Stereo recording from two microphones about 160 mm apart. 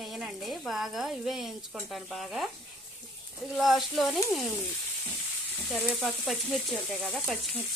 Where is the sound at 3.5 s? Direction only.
Centre (ahead or behind).